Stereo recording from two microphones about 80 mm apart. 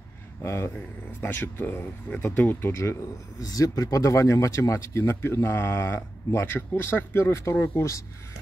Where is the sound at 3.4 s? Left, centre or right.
Left.